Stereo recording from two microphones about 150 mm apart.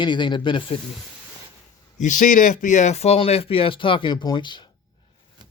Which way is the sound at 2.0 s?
60° left (ahead or behind).